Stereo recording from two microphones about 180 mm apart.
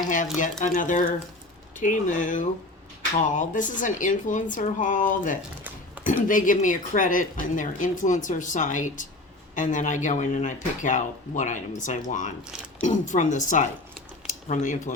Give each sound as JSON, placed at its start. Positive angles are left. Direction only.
{"t": 0.6, "sound": "a woman's voice", "side_deg": 45}